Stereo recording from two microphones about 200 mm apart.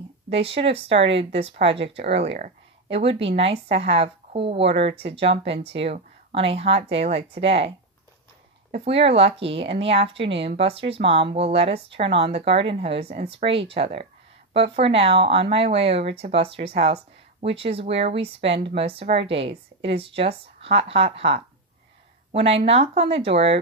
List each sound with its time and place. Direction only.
0.4 s speech: 30° right (ahead or behind)
8.7 s speech: 30° right (ahead or behind)